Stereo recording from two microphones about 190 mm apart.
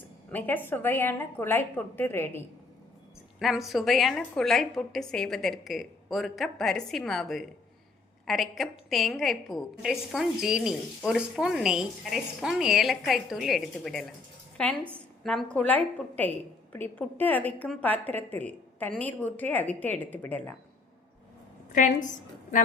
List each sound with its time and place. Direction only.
0.3 s a woman's voice: 10° left (ahead or behind)
3.3 s a woman's voice: centre (ahead or behind)
14.9 s a sound: centre (ahead or behind)
15.5 s a woman's voice: 10° left (ahead or behind)
21.7 s a woman's voice: 40° left (ahead or behind)